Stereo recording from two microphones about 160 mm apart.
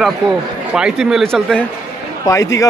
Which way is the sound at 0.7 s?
5° right (ahead or behind).